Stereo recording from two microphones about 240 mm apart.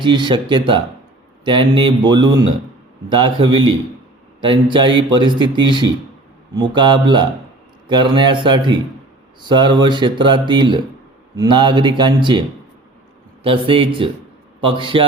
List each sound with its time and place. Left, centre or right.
0.0 s speech: centre